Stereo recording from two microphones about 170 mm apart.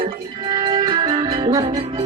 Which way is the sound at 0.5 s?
25° right (ahead or behind).